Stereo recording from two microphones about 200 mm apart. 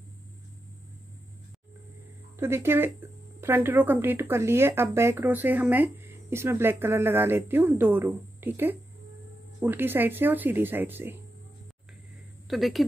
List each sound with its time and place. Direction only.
2.3 s speech: 10° right (ahead or behind)
12.4 s a woman's voice: centre (ahead or behind)